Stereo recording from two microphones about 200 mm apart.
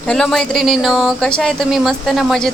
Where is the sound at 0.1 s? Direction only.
5° left (ahead or behind).